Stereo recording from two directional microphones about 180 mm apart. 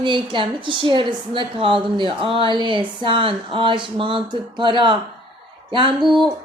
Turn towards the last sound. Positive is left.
turn(degrees=-25)  # may be behind; listen again after turning